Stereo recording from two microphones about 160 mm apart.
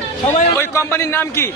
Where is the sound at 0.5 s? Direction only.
15° left (ahead or behind).